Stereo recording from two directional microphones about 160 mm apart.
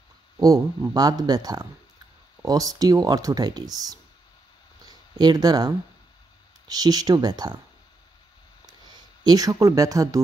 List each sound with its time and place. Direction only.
0.4 s speech: 20° right (ahead or behind)
5.2 s speech: 25° right (ahead or behind)
8.9 s speech: 25° right (ahead or behind)